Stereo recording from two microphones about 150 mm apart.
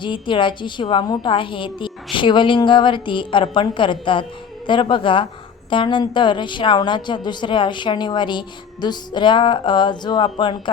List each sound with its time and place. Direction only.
0.0 s a woman's voice: 35° left (ahead or behind)